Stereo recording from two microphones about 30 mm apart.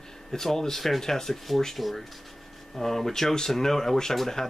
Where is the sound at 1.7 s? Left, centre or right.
Centre.